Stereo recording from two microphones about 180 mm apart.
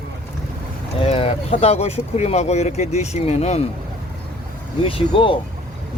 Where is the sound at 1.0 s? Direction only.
35° left (ahead or behind).